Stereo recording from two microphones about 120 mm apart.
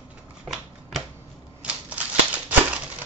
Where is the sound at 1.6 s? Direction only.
10° right (ahead or behind).